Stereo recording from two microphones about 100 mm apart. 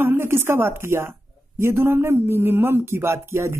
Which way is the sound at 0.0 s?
25° right (ahead or behind).